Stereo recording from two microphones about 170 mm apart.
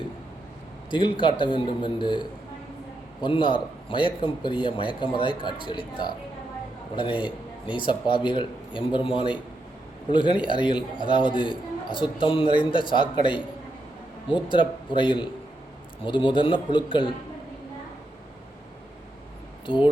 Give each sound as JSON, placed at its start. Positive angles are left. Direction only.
{"t": 0.9, "sound": "a man's voice", "side_deg": 30}
{"t": 14.5, "sound": "a man's voice", "side_deg": 30}
{"t": 19.7, "sound": "a man's voice", "side_deg": 30}